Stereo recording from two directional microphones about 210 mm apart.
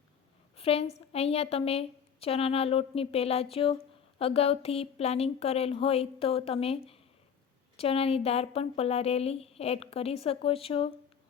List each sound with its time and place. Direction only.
0.5 s a woman's voice: 30° left (ahead or behind)